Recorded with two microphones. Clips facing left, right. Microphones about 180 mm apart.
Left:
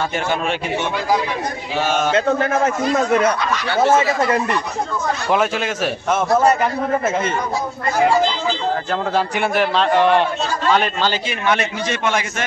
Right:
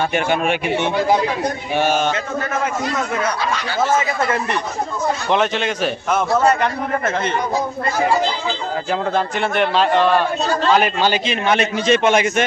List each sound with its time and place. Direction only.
5.3 s speech: 5° left (ahead or behind)
9.1 s speech: 5° left (ahead or behind)
9.9 s a man's voice: 20° left (ahead or behind)
10.7 s a man's voice: 10° right (ahead or behind)